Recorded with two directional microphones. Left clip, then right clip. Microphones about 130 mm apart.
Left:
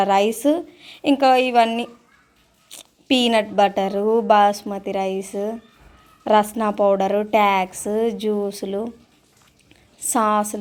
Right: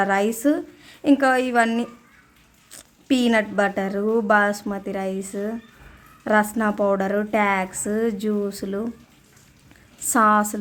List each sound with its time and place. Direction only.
0.0 s a woman's voice: 10° left (ahead or behind)
2.6 s a sound: 35° right (ahead or behind)
3.2 s a woman's voice: 10° left (ahead or behind)
10.1 s a woman's voice: 5° left (ahead or behind)